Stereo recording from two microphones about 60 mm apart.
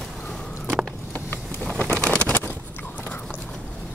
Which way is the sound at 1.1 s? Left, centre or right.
Left.